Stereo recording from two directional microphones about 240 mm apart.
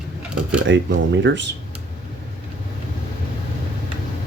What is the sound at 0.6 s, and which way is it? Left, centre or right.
Speech, right.